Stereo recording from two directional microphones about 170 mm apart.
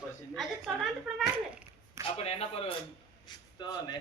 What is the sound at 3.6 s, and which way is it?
Speech, 25° left (ahead or behind).